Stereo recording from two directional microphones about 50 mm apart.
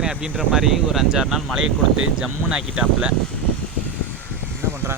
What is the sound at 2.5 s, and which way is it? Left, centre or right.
Speech, centre.